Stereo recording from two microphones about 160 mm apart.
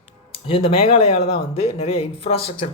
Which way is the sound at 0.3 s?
35° left (ahead or behind).